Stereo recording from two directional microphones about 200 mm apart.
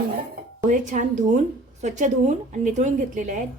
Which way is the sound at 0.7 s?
40° right (ahead or behind).